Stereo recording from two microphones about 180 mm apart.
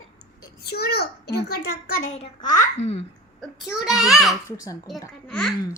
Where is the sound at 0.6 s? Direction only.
60° left (ahead or behind).